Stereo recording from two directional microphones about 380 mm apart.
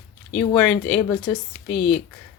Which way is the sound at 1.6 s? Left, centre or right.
Centre.